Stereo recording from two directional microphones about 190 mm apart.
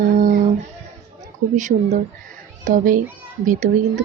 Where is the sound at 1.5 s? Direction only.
40° right (ahead or behind).